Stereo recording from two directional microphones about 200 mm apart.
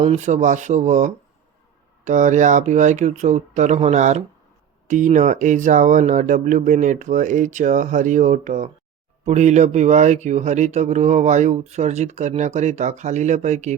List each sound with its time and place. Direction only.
0.0 s speech: 35° right (ahead or behind)